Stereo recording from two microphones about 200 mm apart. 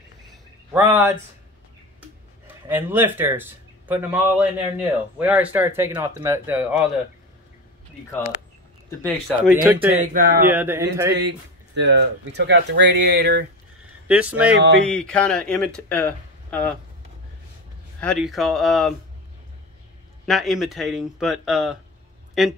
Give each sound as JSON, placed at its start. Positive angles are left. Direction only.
{"t": 0.7, "sound": "speech", "side_deg": -10}
{"t": 9.5, "sound": "speech", "side_deg": -10}
{"t": 9.9, "sound": "speech", "side_deg": -45}
{"t": 10.4, "sound": "speech", "side_deg": -10}
{"t": 11.1, "sound": "speech", "side_deg": -60}
{"t": 14.0, "sound": "speech", "side_deg": -5}
{"t": 14.9, "sound": "speech", "side_deg": 5}
{"t": 18.0, "sound": "speech", "side_deg": 0}
{"t": 20.2, "sound": "speech", "side_deg": 0}